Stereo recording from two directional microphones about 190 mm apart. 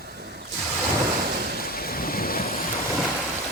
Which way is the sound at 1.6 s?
50° left (ahead or behind).